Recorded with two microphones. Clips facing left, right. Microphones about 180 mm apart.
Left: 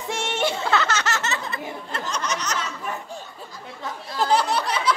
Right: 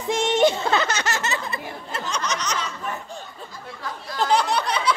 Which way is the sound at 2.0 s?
5° left (ahead or behind).